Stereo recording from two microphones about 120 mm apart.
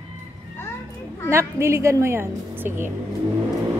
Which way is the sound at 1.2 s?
20° right (ahead or behind).